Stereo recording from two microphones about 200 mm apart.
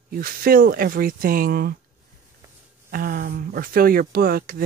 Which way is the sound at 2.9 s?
45° right (ahead or behind).